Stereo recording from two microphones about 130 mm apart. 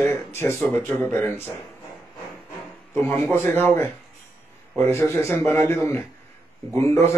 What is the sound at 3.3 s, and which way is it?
Speech, 15° left (ahead or behind).